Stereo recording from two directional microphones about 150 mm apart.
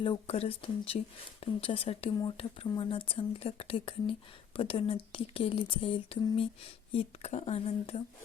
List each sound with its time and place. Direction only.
0.0 s speech: 40° left (ahead or behind)